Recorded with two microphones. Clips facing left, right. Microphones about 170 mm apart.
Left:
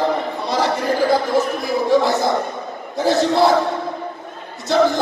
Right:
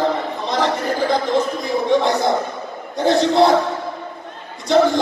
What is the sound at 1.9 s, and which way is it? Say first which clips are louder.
Speech: even; 5° left (ahead or behind).